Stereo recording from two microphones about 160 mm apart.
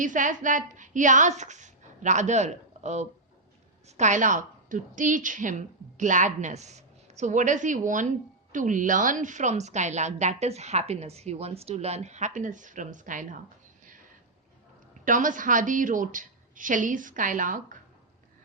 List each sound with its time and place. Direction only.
0.0 s a woman's voice: 55° right (ahead or behind)
14.9 s a woman's voice: 55° right (ahead or behind)